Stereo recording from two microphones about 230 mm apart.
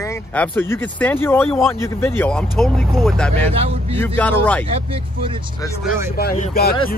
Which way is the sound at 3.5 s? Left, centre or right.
Right.